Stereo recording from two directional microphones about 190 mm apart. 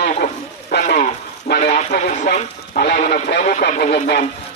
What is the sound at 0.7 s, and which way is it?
Radio, 55° left (ahead or behind).